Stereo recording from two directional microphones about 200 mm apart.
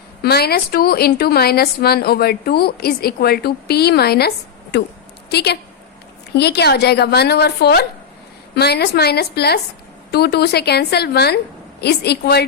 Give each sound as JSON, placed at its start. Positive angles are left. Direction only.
{"t": 0.2, "sound": "a woman's voice", "side_deg": 50}
{"t": 5.3, "sound": "a woman's voice", "side_deg": 55}